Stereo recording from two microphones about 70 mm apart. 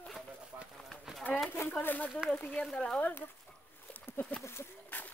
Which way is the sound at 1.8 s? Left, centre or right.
Left.